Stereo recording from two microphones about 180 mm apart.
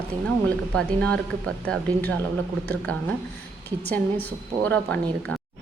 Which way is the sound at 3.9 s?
10° left (ahead or behind).